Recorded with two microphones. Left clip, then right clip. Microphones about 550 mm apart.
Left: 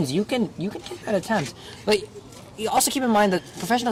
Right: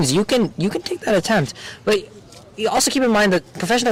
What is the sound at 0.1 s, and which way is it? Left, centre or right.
Speech, right.